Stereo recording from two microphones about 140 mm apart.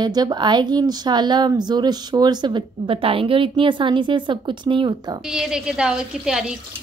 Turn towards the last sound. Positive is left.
turn(degrees=-5)  # may be behind; listen again after turning